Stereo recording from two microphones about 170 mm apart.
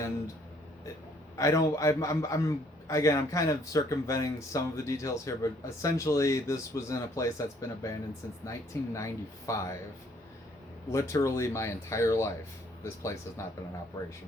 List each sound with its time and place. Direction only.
1.4 s a man's voice: 20° left (ahead or behind)
10.8 s speech: 15° left (ahead or behind)